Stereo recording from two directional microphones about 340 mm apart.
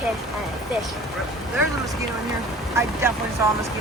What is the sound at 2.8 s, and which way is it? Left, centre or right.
Speech, centre.